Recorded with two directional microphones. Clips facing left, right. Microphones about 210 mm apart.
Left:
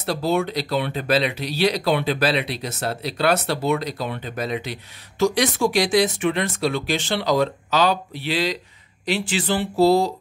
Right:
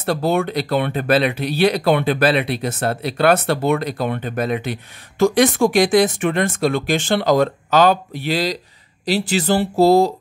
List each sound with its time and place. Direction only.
0.0 s speech: 55° right (ahead or behind)